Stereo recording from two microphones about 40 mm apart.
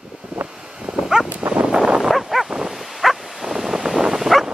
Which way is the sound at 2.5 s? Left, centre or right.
Centre.